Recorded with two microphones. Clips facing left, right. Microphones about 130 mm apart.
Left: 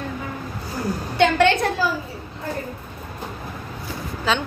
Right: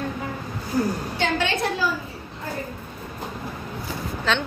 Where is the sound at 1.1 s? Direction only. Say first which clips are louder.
Left 11 dB; 70° left (ahead or behind).